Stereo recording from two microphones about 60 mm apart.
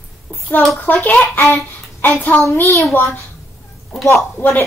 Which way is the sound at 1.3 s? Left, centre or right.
Left.